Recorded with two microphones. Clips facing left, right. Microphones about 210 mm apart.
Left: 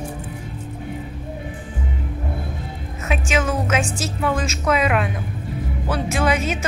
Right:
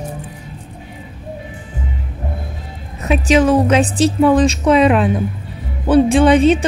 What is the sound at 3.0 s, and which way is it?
A woman's voice, 35° right (ahead or behind).